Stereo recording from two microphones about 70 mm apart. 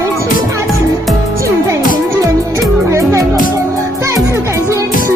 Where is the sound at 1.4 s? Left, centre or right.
Right.